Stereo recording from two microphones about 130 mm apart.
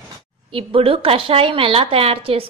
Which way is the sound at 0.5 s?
45° right (ahead or behind).